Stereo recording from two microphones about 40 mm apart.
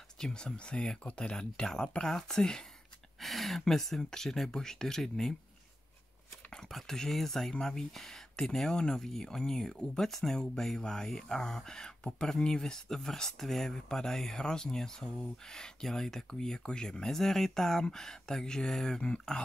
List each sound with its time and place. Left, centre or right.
0.2 s speech: left
3.2 s speech: centre
6.7 s speech: centre